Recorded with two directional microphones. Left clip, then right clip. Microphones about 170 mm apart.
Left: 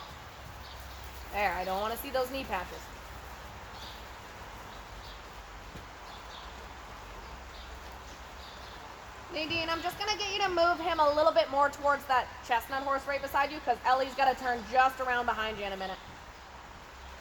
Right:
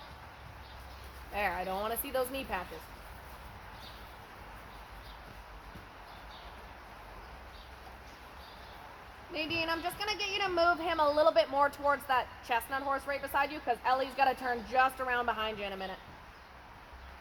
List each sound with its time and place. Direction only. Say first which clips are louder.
1.3 s a woman's voice: left 3 dB; 45° right (ahead or behind)
9.3 s a woman's voice: left 1 dB; 45° right (ahead or behind)